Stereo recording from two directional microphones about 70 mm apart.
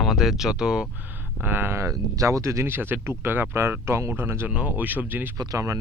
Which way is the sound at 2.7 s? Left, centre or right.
Right.